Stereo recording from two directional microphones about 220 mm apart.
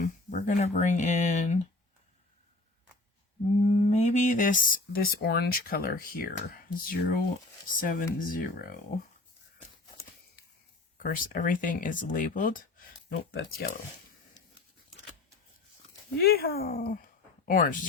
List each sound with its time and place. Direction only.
0.0 s speech: 35° left (ahead or behind)
3.6 s speech: 30° left (ahead or behind)
11.0 s speech: 40° left (ahead or behind)
16.2 s speech: 45° left (ahead or behind)